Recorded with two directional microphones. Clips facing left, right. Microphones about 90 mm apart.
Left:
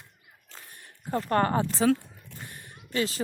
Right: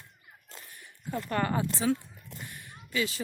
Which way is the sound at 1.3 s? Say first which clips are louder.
Left 5 dB; 40° left (ahead or behind).